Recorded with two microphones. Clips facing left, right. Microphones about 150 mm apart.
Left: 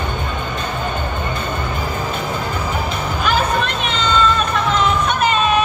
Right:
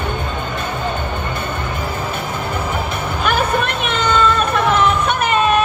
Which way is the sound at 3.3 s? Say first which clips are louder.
Right 1 dB; 55° right (ahead or behind).